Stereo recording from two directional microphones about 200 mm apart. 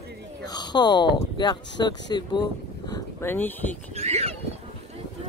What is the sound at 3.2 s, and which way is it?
Speech, 10° left (ahead or behind).